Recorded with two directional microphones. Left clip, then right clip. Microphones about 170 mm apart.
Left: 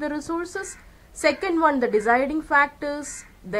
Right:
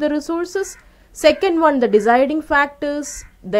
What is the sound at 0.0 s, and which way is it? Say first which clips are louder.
A woman's voice: right 8 dB; 40° right (ahead or behind).